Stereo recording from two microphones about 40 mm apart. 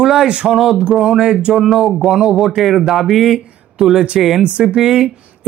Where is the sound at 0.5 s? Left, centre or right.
Centre.